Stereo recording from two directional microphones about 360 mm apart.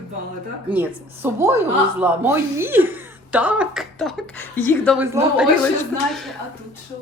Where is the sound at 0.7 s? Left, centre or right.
Centre.